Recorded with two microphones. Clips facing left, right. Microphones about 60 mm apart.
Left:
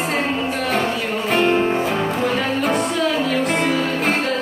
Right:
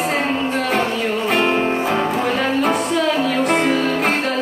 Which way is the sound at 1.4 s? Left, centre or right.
Right.